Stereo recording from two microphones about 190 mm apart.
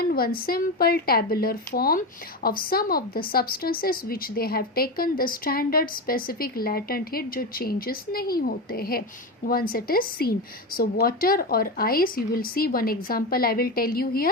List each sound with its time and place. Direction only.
0.0 s speech: 50° left (ahead or behind)